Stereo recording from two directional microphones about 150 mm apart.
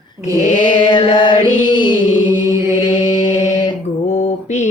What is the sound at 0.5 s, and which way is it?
Chant, 60° left (ahead or behind).